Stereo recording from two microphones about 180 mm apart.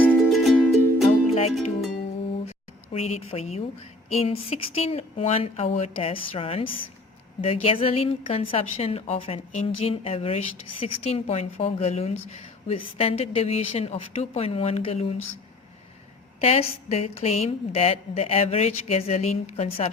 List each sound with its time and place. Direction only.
0.0 s music: centre (ahead or behind)
1.0 s music: 35° left (ahead or behind)
2.9 s a woman's voice: 35° left (ahead or behind)
16.4 s a woman's voice: 35° left (ahead or behind)